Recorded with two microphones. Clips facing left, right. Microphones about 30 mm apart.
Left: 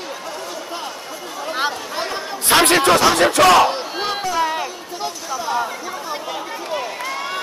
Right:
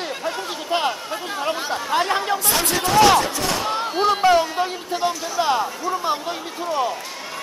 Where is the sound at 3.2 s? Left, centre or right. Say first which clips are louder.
Left 10 dB; left.